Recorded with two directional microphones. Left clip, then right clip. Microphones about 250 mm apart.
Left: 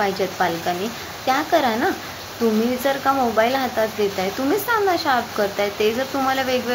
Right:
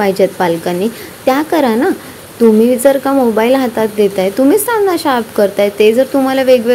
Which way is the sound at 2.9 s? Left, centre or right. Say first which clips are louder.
Right 8 dB; right.